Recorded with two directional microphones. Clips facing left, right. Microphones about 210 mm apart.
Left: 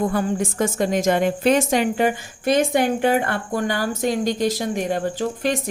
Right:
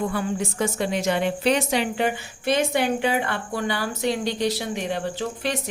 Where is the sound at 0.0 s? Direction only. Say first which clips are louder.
Left 4 dB; 45° left (ahead or behind).